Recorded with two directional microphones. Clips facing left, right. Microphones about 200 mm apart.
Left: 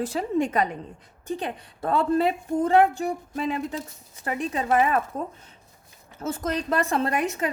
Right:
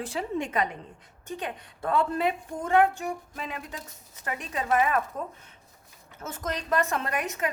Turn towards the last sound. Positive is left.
turn(degrees=30)  # may be behind; listen again after turning